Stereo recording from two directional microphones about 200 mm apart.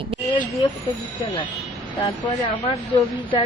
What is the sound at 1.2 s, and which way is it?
Speech, 25° left (ahead or behind).